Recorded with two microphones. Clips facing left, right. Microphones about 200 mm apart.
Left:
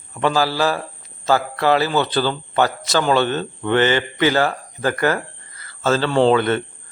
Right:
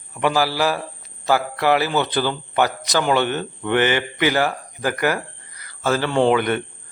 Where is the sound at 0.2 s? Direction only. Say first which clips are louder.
Left 1 dB; 15° right (ahead or behind).